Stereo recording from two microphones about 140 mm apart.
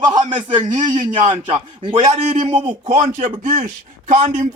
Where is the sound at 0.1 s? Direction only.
35° right (ahead or behind).